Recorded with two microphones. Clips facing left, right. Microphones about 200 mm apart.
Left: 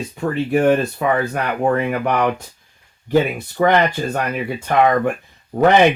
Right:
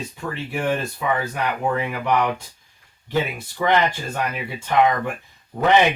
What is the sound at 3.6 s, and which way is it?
Speech, 55° left (ahead or behind).